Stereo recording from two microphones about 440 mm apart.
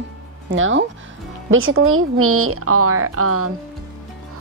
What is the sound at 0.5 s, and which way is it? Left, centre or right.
A woman's voice, right.